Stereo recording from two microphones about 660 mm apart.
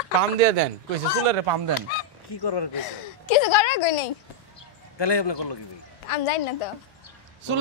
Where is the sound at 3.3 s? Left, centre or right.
Left.